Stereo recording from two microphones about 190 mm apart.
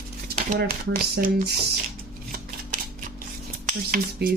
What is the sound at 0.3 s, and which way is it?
Typewriter, 45° right (ahead or behind).